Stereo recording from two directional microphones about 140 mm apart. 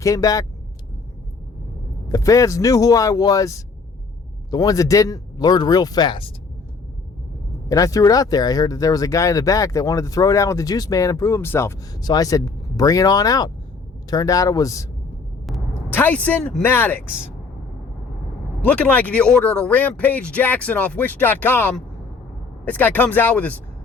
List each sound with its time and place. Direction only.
0.0 s speech: 25° left (ahead or behind)
2.1 s speech: 25° left (ahead or behind)
7.7 s speech: 25° left (ahead or behind)
11.9 s speech: 30° left (ahead or behind)
15.9 s speech: 10° left (ahead or behind)
18.6 s speech: 10° left (ahead or behind)